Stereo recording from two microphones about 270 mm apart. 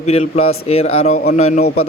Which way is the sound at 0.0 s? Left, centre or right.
Left.